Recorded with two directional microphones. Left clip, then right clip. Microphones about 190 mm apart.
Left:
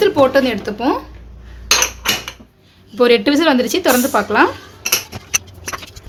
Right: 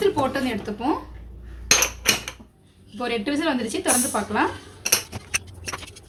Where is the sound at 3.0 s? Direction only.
55° left (ahead or behind).